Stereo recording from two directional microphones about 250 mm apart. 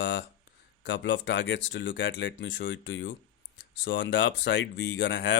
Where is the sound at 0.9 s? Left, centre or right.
Left.